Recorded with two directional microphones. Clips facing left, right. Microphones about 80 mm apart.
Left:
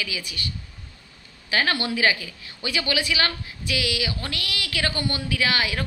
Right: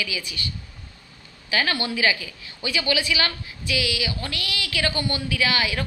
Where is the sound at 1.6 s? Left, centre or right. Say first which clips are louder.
Left 1 dB; left.